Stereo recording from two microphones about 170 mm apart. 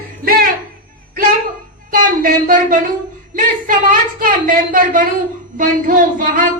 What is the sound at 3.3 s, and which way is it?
A woman's voice, 55° right (ahead or behind).